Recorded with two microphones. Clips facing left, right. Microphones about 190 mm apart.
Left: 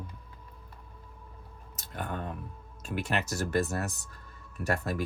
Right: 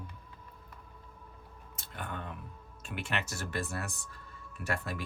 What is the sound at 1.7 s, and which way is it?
Speech, 40° left (ahead or behind).